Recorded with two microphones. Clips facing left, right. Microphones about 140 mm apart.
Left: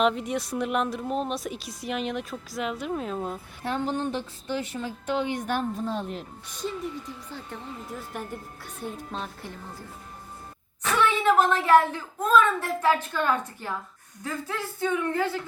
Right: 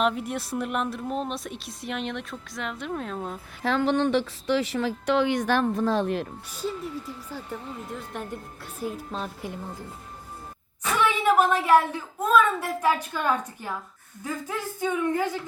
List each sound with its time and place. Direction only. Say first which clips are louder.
0.0 s a woman's voice: left 1 dB; centre (ahead or behind)
3.6 s a woman's voice: right 5 dB; 90° right
6.5 s a woman's voice: left 1 dB; 5° right (ahead or behind)
9.1 s a woman's voice: right 2 dB; centre (ahead or behind)
10.8 s a woman's voice: even; 10° right (ahead or behind)